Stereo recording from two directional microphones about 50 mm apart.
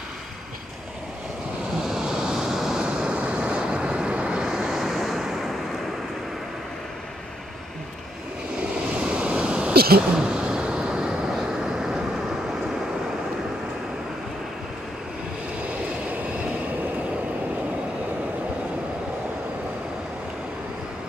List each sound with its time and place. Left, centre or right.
1.8 s vehicle: centre
9.0 s waves: right
10.1 s vehicle: centre